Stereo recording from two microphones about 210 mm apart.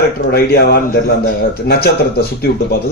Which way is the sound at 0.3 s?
50° left (ahead or behind).